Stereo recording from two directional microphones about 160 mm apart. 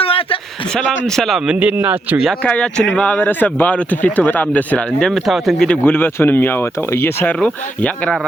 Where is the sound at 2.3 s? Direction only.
5° left (ahead or behind).